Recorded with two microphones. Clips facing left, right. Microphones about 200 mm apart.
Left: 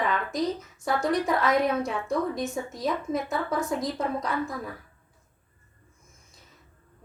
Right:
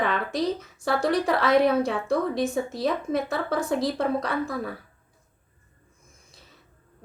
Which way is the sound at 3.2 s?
75° right (ahead or behind).